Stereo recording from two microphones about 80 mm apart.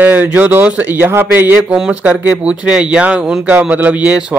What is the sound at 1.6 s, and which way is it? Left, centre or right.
Speech, centre.